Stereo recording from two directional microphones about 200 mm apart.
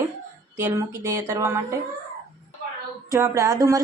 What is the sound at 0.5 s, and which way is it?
Speech, 15° right (ahead or behind).